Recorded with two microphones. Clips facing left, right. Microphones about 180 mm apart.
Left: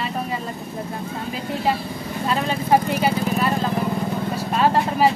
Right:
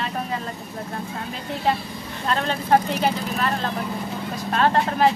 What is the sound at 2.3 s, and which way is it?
Speech, 5° left (ahead or behind).